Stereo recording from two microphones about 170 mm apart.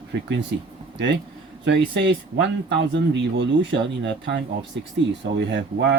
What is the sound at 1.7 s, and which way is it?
Speech, 85° right.